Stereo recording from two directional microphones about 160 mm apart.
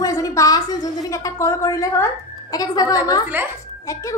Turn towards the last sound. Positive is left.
turn(degrees=20)  # may be behind; listen again after turning